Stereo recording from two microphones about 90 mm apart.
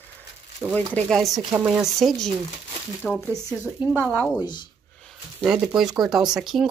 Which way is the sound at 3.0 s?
10° left (ahead or behind).